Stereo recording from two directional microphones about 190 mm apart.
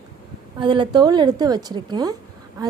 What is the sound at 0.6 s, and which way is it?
A woman's voice, 25° right (ahead or behind).